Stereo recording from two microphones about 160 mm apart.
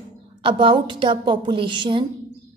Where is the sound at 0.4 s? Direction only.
35° right (ahead or behind).